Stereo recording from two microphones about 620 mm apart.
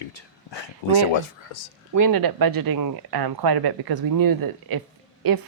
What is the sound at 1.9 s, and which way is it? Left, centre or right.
Speech, right.